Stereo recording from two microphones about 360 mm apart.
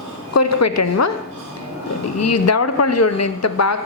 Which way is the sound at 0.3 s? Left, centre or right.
Left.